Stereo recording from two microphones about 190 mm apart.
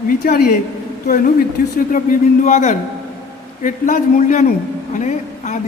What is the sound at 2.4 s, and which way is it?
A woman's voice, 40° left (ahead or behind).